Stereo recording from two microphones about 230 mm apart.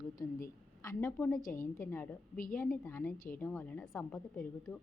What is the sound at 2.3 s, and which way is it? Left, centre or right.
Speech, left.